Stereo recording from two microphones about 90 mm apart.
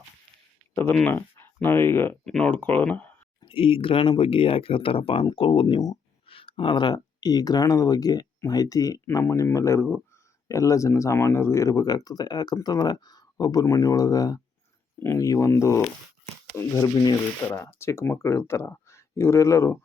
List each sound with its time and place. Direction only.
0.7 s speech: 25° left (ahead or behind)
2.2 s speech: 5° left (ahead or behind)
2.5 s speech: 20° left (ahead or behind)
3.4 s speech: 80° left
5.2 s speech: 75° left (ahead or behind)
6.2 s speech: 90° left; by 19.8 s 30° left (ahead or behind)